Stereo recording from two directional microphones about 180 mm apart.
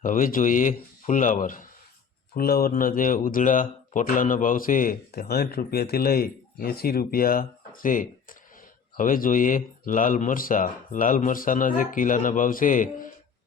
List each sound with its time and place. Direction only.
0.0 s speech: 45° left (ahead or behind)